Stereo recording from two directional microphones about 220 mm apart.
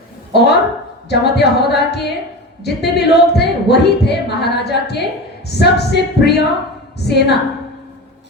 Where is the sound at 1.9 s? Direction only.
50° left (ahead or behind).